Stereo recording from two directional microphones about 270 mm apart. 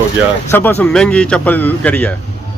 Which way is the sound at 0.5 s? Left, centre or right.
Centre.